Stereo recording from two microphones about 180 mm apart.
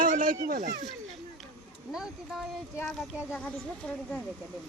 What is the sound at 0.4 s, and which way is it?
Speech, 50° right (ahead or behind).